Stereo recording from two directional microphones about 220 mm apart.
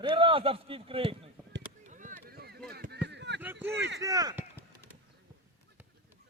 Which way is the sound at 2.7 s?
45° right (ahead or behind).